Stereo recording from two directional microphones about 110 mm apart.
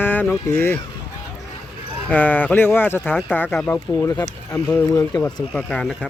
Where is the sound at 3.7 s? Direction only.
30° left (ahead or behind).